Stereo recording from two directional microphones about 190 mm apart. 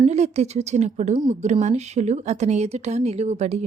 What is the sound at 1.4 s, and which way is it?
A woman's voice, 35° right (ahead or behind).